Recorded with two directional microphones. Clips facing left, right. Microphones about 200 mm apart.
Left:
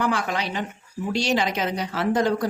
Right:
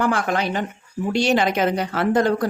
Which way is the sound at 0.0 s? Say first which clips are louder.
Right 4 dB; 50° right (ahead or behind).